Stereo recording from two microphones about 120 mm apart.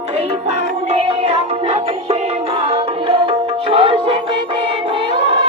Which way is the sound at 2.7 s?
50° right (ahead or behind).